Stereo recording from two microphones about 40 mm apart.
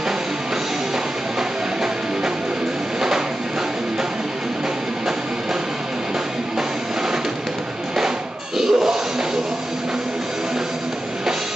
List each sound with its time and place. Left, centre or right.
8.5 s music: centre